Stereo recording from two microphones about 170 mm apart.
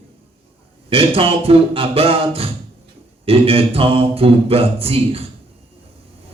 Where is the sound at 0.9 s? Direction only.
35° right (ahead or behind).